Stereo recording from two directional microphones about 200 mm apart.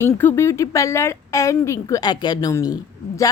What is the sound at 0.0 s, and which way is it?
A woman's voice, 10° left (ahead or behind).